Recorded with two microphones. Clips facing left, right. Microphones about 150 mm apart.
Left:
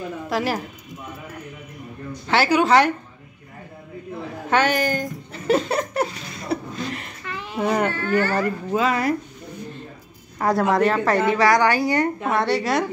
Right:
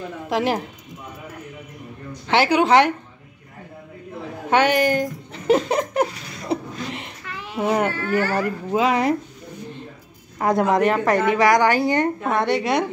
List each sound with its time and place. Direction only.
0.3 s a woman's voice: 20° right (ahead or behind)
2.3 s speech: 15° right (ahead or behind)
4.5 s speech: 15° right (ahead or behind)
6.5 s a sound: 20° right (ahead or behind)
7.5 s speech: 5° right (ahead or behind)
10.4 s a woman's voice: 20° right (ahead or behind)